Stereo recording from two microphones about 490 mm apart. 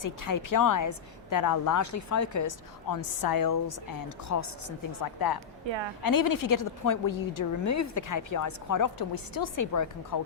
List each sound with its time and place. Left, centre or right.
0.0 s a woman's voice: left
5.6 s a woman's voice: right
6.0 s a woman's voice: left